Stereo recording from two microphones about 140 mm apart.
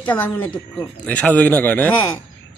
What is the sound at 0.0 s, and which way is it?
Speech, 10° left (ahead or behind).